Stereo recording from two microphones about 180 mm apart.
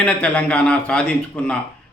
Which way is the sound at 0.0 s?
5° left (ahead or behind).